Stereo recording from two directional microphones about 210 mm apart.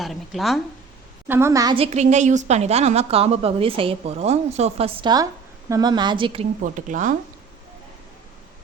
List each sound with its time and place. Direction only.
0.0 s a woman's voice: centre (ahead or behind)
1.3 s a woman's voice: 15° right (ahead or behind)
6.6 s speech: 35° right (ahead or behind)